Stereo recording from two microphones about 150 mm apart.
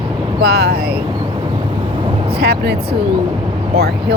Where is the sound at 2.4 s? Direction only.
90° right.